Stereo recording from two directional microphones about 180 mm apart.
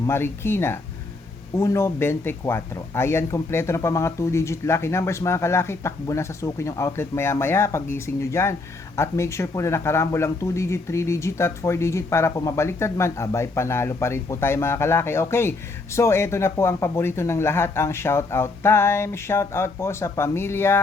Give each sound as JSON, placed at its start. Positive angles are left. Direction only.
{"t": 0.1, "sound": "speech", "side_deg": 15}